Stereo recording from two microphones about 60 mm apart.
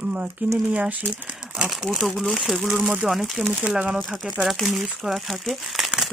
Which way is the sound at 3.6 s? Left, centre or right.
Centre.